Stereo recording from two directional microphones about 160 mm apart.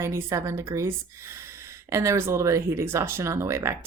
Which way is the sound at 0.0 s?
20° right (ahead or behind).